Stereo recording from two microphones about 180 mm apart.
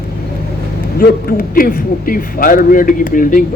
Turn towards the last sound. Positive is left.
turn(degrees=50)  # may be behind; listen again after turning